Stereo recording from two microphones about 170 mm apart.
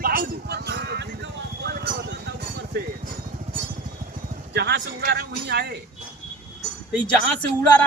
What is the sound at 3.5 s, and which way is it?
Vehicle, 40° right (ahead or behind).